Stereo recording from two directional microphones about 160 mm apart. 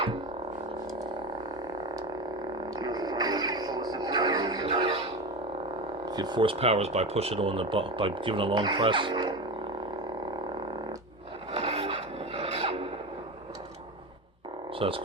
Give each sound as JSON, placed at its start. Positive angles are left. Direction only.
{"t": 2.7, "sound": "music", "side_deg": -25}
{"t": 6.1, "sound": "speech", "side_deg": -25}
{"t": 11.5, "sound": "filing", "side_deg": -40}
{"t": 14.8, "sound": "speech", "side_deg": -35}